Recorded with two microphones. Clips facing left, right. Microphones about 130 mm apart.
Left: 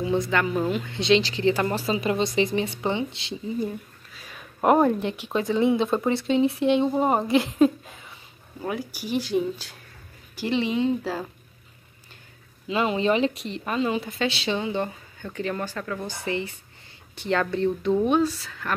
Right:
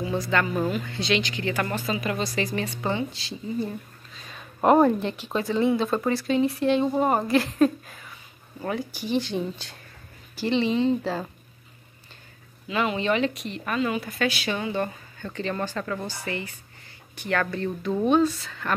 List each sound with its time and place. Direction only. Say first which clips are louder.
0.0 s a sound: left 4 dB; 25° left (ahead or behind)
0.3 s speech: left 1 dB; 15° left (ahead or behind)
4.7 s speech: right 1 dB; 10° left (ahead or behind)
8.5 s speech: even; 10° left (ahead or behind)
12.6 s speech: left 2 dB; 30° left (ahead or behind)
15.2 s speech: even; 5° left (ahead or behind)
16.1 s speech: left 3 dB; 20° left (ahead or behind)
18.0 s speech: right 1 dB; 10° left (ahead or behind)